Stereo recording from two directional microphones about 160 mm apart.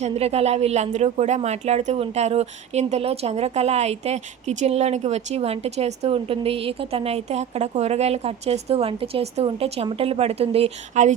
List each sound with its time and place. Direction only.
0.0 s speech: 40° right (ahead or behind)